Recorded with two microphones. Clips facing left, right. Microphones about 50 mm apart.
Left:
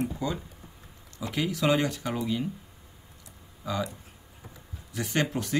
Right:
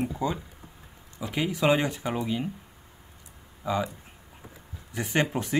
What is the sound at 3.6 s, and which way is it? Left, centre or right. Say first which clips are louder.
Speech: right 4 dB; right.